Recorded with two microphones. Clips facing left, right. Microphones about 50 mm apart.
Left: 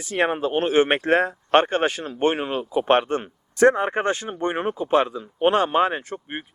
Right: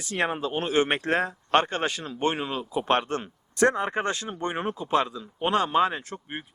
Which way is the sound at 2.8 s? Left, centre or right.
Left.